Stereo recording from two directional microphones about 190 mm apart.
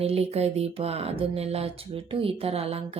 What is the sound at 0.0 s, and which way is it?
Speech, 30° right (ahead or behind).